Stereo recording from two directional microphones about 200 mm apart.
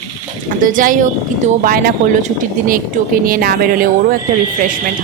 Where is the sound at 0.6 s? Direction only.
40° right (ahead or behind).